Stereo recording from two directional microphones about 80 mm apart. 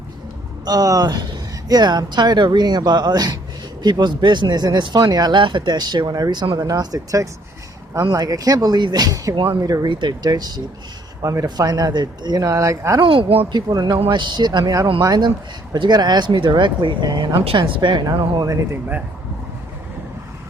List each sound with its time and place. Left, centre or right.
0.6 s speech: right
5.3 s speech: right
6.6 s speech: right
9.3 s speech: right
9.6 s speech: right
10.0 s speech: right
11.2 s speech: right
11.4 s speech: right
13.0 s speech: right
17.6 s speech: right
18.0 s speech: right
18.7 s speech: right